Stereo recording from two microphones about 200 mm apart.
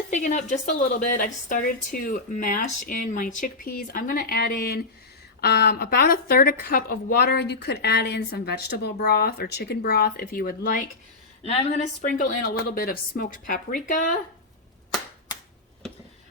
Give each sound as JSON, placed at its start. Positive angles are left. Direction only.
{"t": 0.1, "sound": "a woman's voice", "side_deg": 40}